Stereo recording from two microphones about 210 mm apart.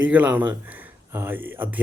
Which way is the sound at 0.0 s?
5° right (ahead or behind).